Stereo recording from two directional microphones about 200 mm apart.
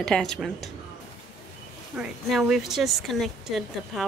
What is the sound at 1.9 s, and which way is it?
Speech, 5° right (ahead or behind).